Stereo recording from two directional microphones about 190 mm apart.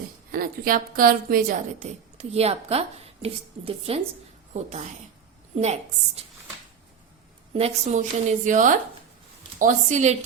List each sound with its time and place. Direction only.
0.3 s a woman's voice: 50° right (ahead or behind)
7.5 s a woman's voice: 35° right (ahead or behind)